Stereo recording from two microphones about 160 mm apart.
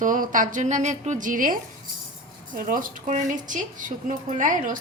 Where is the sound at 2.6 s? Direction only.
60° right (ahead or behind).